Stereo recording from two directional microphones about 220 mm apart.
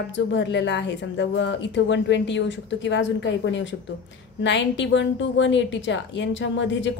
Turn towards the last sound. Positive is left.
turn(degrees=55)  # may be behind; listen again after turning